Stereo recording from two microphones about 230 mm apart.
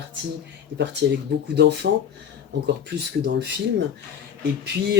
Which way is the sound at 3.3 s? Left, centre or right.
Right.